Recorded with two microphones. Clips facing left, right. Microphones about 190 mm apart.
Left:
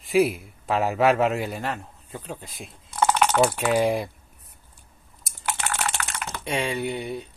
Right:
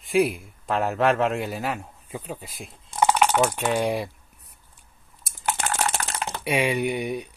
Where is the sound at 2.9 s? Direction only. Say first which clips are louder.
Right 1 dB; 10° right (ahead or behind).